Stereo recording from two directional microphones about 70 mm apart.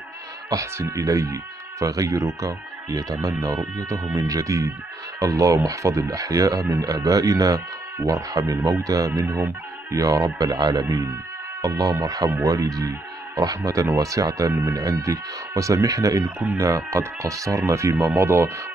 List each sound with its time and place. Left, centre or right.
0.5 s speech: right